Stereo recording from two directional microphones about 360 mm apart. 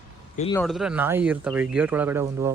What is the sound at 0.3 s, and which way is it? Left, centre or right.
Speech, centre.